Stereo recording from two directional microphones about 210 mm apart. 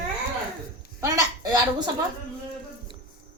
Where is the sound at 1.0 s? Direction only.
15° right (ahead or behind).